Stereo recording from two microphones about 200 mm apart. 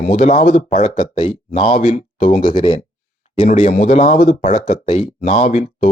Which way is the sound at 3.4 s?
35° left (ahead or behind).